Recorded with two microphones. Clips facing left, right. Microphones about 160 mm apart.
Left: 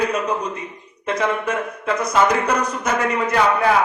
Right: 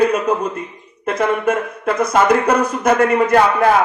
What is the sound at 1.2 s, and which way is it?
Speech, 55° right (ahead or behind).